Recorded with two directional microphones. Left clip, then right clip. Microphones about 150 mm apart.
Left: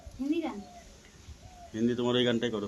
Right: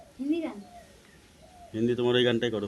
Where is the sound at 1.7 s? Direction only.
45° right (ahead or behind).